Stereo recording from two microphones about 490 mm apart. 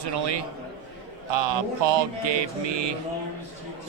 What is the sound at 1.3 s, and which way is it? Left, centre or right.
Mantra, right.